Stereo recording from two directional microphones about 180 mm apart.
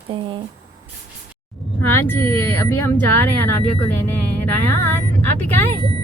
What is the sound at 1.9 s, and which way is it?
Speech, 15° left (ahead or behind).